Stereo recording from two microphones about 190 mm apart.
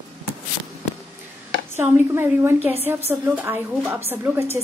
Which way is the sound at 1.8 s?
15° right (ahead or behind).